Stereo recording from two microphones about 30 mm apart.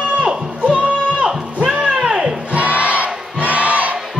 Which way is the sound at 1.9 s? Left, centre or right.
Right.